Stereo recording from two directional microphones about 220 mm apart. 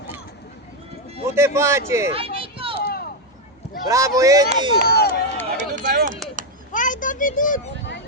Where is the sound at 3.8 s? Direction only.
15° right (ahead or behind).